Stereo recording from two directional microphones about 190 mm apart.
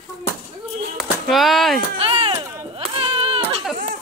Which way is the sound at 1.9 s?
30° right (ahead or behind).